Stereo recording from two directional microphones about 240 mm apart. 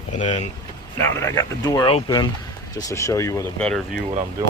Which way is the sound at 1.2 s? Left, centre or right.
Centre.